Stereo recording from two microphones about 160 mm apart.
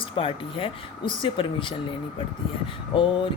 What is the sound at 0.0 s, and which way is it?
Speech, 35° left (ahead or behind).